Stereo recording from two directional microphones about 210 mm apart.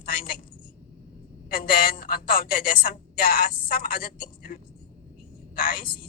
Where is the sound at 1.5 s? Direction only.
45° left (ahead or behind).